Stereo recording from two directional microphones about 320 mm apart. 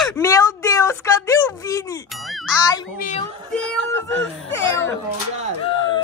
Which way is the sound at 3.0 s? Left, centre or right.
Left.